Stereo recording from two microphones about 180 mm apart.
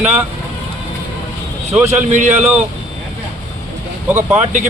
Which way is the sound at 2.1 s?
40° right (ahead or behind).